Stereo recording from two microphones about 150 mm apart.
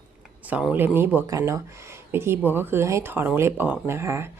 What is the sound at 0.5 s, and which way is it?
Speech, 10° right (ahead or behind).